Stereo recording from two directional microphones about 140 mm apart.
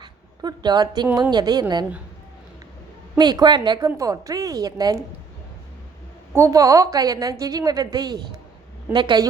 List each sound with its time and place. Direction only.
0.0 s a sound: 30° right (ahead or behind)
1.1 s a woman's voice: 30° right (ahead or behind)
3.2 s a woman's voice: 30° right (ahead or behind)
6.3 s a woman's voice: 20° right (ahead or behind)